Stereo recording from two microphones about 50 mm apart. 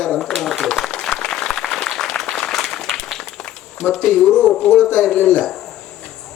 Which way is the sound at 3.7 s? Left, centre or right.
Centre.